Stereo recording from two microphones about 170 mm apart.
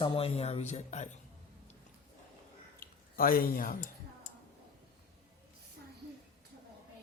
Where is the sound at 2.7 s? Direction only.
55° left (ahead or behind).